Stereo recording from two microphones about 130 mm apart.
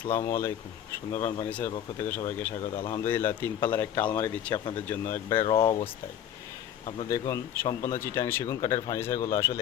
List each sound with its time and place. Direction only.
0.2 s speech: 20° left (ahead or behind)
1.5 s speech: 10° left (ahead or behind)
5.5 s speech: 40° left (ahead or behind)
7.1 s speech: 25° left (ahead or behind)